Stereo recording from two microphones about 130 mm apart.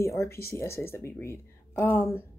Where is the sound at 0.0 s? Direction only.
20° left (ahead or behind).